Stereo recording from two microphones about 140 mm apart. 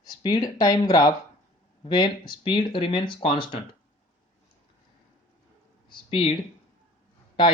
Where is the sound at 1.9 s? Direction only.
35° left (ahead or behind).